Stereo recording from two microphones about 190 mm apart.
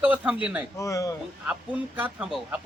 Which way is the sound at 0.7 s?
15° left (ahead or behind).